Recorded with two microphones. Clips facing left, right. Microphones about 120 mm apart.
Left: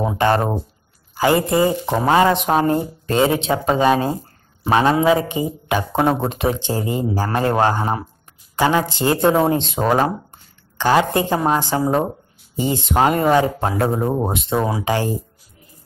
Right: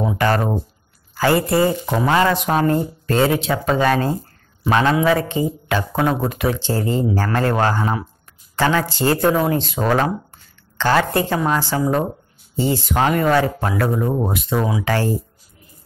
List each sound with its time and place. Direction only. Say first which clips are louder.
0.0 s a woman's voice: left 1 dB; 30° left (ahead or behind)
14.9 s a woman's voice: even; 15° left (ahead or behind)